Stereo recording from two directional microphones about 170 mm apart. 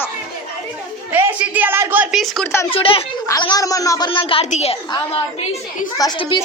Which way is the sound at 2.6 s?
30° left (ahead or behind).